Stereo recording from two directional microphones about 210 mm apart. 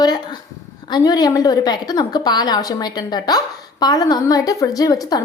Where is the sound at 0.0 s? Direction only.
20° left (ahead or behind).